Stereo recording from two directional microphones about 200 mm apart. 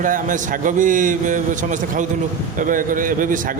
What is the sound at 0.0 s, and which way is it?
A man's voice, 40° right (ahead or behind).